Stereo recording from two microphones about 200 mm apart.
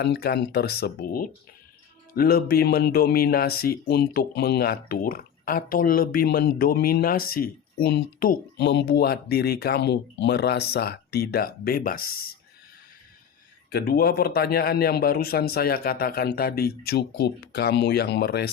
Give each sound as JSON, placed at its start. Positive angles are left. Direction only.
{"t": 0.0, "sound": "speech", "side_deg": 55}
{"t": 13.7, "sound": "speech", "side_deg": 50}